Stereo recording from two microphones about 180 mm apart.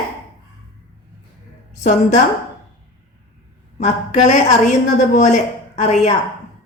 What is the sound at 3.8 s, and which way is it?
A woman's voice, 40° left (ahead or behind).